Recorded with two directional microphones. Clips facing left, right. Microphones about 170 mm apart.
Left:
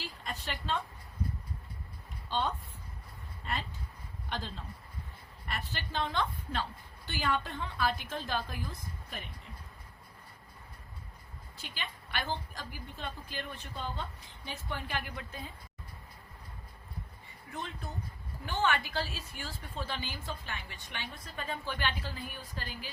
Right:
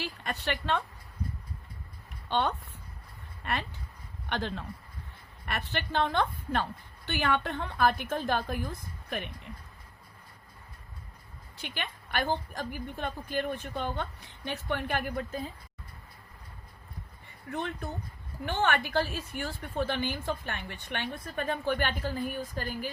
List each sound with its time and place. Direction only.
0.0 s a woman's voice: 70° right (ahead or behind)
2.3 s a woman's voice: 65° right (ahead or behind)
11.5 s a woman's voice: 60° right (ahead or behind); by 15.4 s 40° right (ahead or behind)
17.5 s a woman's voice: 60° right (ahead or behind)